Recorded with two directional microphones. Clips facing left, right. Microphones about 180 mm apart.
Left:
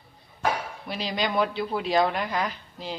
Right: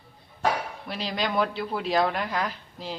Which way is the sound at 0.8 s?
Centre (ahead or behind).